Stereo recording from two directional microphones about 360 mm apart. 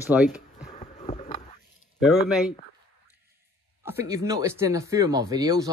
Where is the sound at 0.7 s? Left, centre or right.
Centre.